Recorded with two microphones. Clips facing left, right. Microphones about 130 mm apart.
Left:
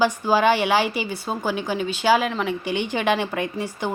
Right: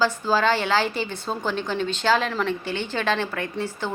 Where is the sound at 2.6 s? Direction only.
15° left (ahead or behind).